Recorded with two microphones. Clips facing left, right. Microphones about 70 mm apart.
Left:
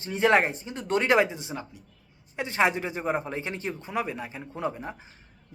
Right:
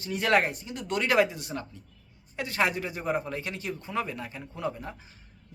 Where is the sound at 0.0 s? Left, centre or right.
Left.